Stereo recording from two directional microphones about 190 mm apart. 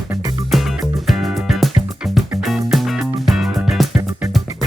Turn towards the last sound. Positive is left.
turn(degrees=0)  # may be behind; listen again after turning